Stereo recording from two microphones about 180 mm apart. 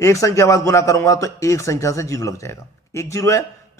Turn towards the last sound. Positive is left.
turn(degrees=15)  # may be behind; listen again after turning